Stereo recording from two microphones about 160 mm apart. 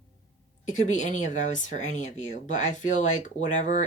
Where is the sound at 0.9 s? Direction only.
50° left (ahead or behind).